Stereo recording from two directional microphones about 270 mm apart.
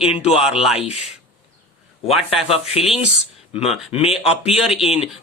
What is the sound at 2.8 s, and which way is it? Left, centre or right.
A man's voice, left.